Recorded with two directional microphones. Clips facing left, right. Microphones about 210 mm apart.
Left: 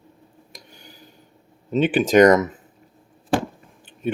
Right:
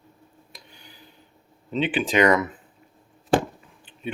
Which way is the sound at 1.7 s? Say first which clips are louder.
Left 6 dB; 45° left (ahead or behind).